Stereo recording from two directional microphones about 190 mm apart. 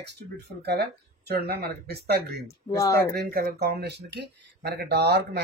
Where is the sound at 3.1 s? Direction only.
50° right (ahead or behind).